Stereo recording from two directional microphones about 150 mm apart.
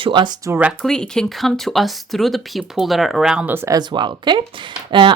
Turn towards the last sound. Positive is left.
turn(degrees=-35)  # may be behind; listen again after turning